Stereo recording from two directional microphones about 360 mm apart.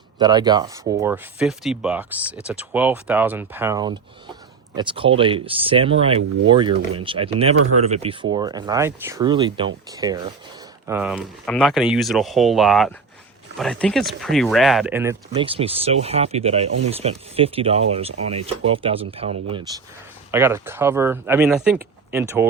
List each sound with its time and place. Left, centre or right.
0.2 s speech: centre